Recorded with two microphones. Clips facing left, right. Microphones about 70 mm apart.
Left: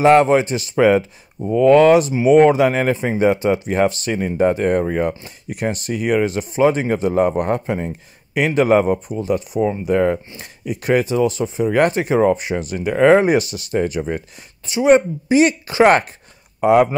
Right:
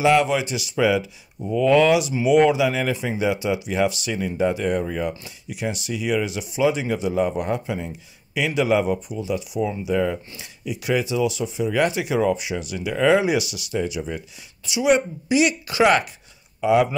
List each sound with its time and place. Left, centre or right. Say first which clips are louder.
0.0 s speech: left 6 dB; left